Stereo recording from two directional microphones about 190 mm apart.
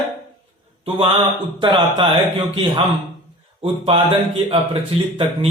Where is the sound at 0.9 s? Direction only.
30° right (ahead or behind).